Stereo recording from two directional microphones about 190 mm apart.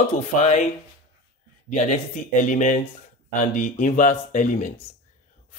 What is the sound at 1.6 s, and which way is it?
Speech, 40° left (ahead or behind).